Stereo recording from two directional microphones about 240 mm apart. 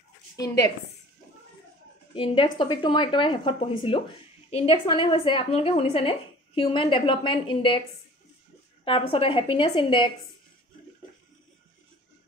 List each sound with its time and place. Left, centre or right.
2.1 s a woman's voice: left
8.8 s a woman's voice: left